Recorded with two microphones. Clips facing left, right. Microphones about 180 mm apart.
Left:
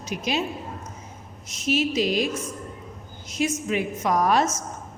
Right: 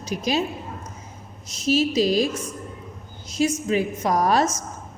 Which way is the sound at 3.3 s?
35° right (ahead or behind).